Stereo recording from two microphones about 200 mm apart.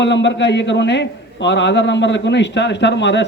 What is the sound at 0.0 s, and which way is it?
A man's voice, 60° left (ahead or behind).